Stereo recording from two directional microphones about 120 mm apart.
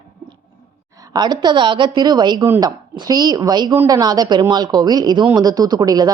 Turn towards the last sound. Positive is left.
turn(degrees=-30)  # may be behind; listen again after turning